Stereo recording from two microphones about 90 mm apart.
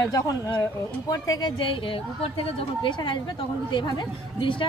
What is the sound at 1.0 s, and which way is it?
Speech, 45° left (ahead or behind).